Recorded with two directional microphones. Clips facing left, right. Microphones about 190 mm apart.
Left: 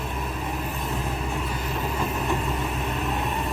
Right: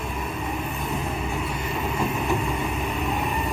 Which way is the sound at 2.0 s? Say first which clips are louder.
Right 3 dB; 10° right (ahead or behind).